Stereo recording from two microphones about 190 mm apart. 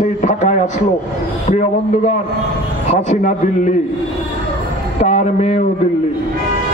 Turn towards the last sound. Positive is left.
turn(degrees=35)  # may be behind; listen again after turning